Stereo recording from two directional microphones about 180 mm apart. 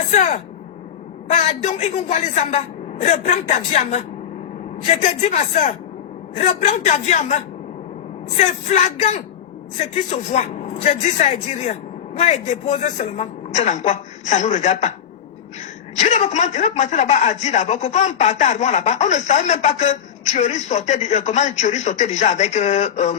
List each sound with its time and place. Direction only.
0.1 s speech: 40° left (ahead or behind)
16.0 s speech: 40° left (ahead or behind)